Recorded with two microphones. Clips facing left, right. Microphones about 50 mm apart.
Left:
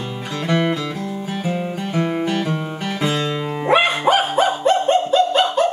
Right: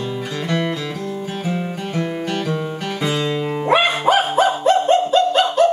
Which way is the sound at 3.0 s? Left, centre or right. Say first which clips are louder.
Right 1 dB; centre.